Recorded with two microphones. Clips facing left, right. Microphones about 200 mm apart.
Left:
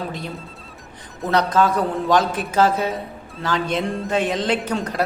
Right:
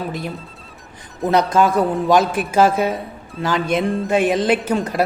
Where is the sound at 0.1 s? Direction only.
5° right (ahead or behind).